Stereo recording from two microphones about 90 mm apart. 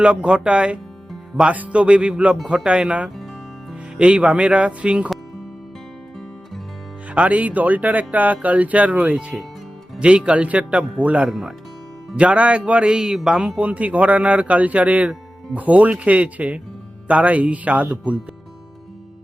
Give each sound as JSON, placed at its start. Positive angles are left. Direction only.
{"t": 0.0, "sound": "speech", "side_deg": -10}
{"t": 7.1, "sound": "speech", "side_deg": -15}
{"t": 11.3, "sound": "speech", "side_deg": -5}
{"t": 12.1, "sound": "speech", "side_deg": -15}
{"t": 13.6, "sound": "speech", "side_deg": -15}